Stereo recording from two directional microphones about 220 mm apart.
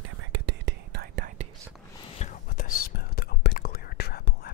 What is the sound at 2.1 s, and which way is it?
Whispering, 35° left (ahead or behind).